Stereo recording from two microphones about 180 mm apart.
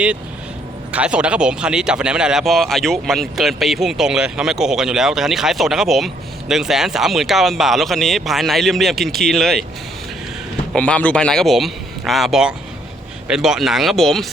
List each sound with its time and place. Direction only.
0.9 s speech: 5° right (ahead or behind)
10.8 s speech: 5° left (ahead or behind)